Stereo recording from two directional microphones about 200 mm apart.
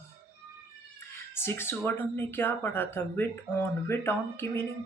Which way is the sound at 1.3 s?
10° left (ahead or behind).